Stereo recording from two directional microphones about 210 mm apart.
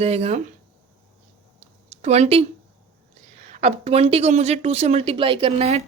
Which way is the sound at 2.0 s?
30° right (ahead or behind).